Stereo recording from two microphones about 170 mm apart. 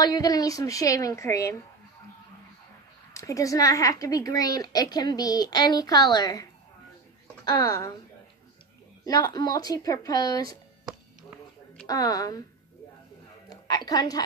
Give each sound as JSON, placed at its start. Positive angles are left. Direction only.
{"t": 0.0, "sound": "a woman's voice", "side_deg": 20}
{"t": 3.1, "sound": "a woman's voice", "side_deg": 20}
{"t": 7.4, "sound": "a woman's voice", "side_deg": 20}
{"t": 9.0, "sound": "a woman's voice", "side_deg": 25}
{"t": 11.9, "sound": "a woman's voice", "side_deg": 20}
{"t": 13.5, "sound": "a sound", "side_deg": 20}